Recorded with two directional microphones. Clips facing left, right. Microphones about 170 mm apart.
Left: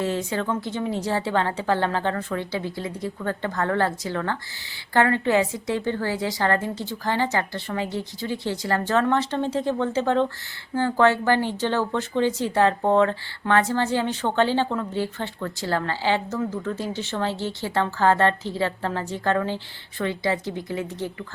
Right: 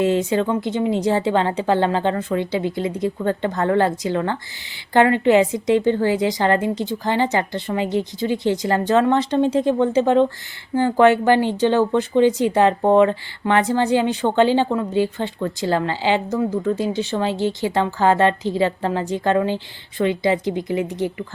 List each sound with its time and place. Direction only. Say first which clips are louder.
0.0 s a woman's voice: right 7 dB; 20° right (ahead or behind)